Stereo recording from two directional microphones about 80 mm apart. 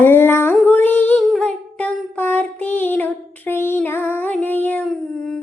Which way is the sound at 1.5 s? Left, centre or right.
Left.